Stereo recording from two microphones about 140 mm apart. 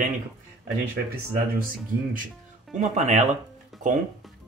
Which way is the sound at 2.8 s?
60° right (ahead or behind).